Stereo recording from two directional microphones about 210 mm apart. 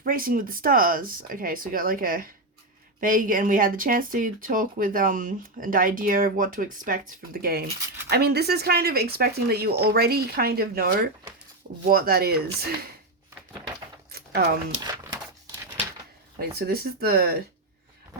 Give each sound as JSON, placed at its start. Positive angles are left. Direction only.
{"t": 0.0, "sound": "speech", "side_deg": -40}
{"t": 14.1, "sound": "a sound", "side_deg": -45}
{"t": 16.4, "sound": "speech", "side_deg": -45}